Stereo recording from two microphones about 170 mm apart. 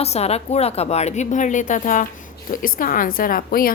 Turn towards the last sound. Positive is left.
turn(degrees=60)  # may be behind; listen again after turning